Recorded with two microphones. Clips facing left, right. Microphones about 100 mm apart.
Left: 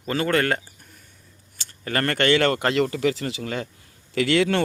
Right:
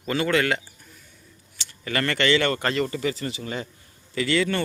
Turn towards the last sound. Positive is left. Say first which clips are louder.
# left 3 dB
turn(degrees=70)  # may be behind; listen again after turning